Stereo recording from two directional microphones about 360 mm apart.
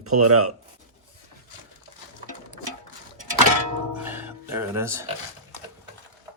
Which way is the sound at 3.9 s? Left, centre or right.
Centre.